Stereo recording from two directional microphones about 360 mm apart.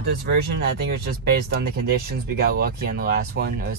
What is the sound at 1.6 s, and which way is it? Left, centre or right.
Speech, right.